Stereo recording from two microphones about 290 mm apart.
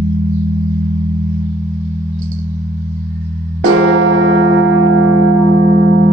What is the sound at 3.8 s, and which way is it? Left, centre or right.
Music, right.